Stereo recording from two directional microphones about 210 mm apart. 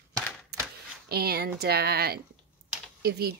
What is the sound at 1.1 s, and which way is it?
Speech, 45° right (ahead or behind).